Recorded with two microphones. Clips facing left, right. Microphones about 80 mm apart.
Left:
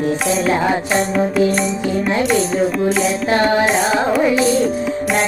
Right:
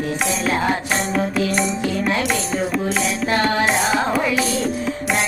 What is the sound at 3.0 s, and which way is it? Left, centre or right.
Carnatic music, left.